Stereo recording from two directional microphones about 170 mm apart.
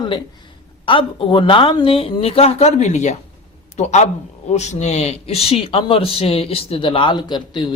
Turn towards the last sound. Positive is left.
turn(degrees=25)  # may be behind; listen again after turning